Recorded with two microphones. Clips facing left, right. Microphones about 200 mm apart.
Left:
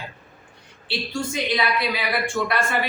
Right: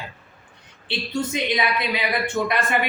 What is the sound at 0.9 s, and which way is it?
A man's voice, 20° right (ahead or behind).